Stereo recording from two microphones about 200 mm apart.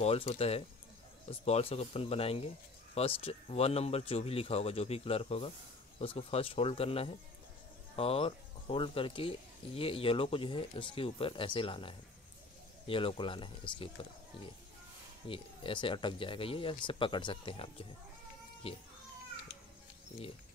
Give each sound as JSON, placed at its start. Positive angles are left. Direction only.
{"t": 0.0, "sound": "speech", "side_deg": 30}
{"t": 15.2, "sound": "speech", "side_deg": 25}